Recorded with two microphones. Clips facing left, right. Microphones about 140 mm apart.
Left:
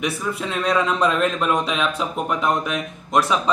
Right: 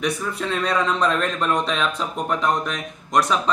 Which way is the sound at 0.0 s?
5° left (ahead or behind).